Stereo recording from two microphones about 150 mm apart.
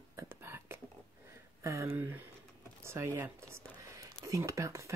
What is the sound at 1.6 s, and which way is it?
Speech, 20° right (ahead or behind).